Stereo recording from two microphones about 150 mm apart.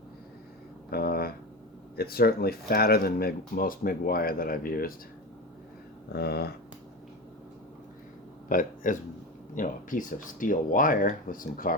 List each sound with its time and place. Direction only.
0.9 s a sound: 90° left
2.0 s speech: 90° left; by 4.9 s 75° left (ahead or behind)
6.1 s speech: 90° left
8.4 s speech: 65° left (ahead or behind)